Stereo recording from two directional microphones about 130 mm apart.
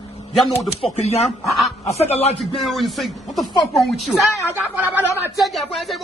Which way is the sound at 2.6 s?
Centre (ahead or behind).